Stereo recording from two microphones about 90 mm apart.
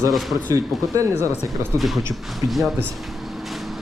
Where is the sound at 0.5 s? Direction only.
35° right (ahead or behind).